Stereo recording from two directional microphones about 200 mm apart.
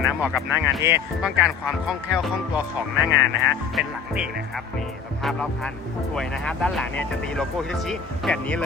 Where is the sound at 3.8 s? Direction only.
5° right (ahead or behind).